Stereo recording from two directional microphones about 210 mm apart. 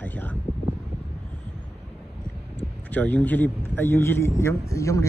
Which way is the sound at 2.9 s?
5° left (ahead or behind).